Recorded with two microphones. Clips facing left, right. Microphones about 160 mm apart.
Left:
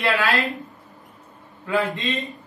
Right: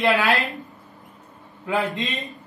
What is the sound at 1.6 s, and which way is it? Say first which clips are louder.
Speech: left 1 dB; 20° right (ahead or behind).